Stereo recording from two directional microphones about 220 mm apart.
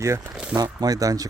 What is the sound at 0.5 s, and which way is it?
Speech, 15° right (ahead or behind).